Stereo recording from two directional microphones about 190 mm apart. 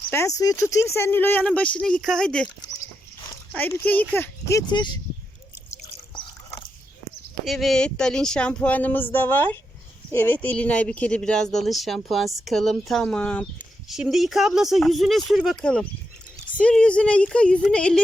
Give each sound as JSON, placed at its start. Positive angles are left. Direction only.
{"t": 0.1, "sound": "speech", "side_deg": 15}
{"t": 3.5, "sound": "speech", "side_deg": 10}
{"t": 5.8, "sound": "liquid", "side_deg": 30}
{"t": 7.4, "sound": "speech", "side_deg": 0}